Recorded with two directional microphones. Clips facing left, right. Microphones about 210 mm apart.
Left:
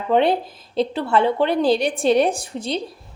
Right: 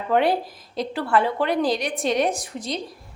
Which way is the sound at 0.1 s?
25° left (ahead or behind).